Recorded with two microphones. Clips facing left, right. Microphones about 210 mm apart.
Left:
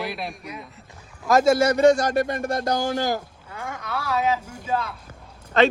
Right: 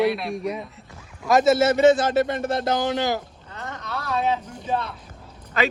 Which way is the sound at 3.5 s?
10° left (ahead or behind).